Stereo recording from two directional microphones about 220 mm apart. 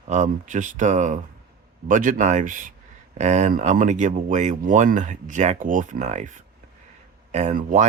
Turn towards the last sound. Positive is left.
turn(degrees=-35)  # may be behind; listen again after turning